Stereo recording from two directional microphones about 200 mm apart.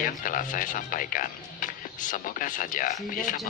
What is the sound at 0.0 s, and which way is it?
Speech, 40° left (ahead or behind).